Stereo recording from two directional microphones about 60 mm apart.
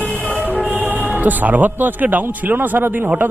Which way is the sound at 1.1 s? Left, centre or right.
Right.